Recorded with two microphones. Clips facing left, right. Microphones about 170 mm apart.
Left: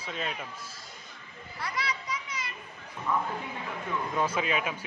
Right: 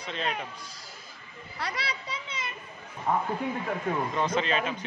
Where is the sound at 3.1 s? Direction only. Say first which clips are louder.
Right 2 dB; 50° right (ahead or behind).